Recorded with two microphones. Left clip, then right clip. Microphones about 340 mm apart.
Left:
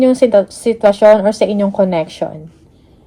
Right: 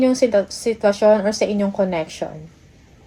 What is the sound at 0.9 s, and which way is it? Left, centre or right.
Speech, left.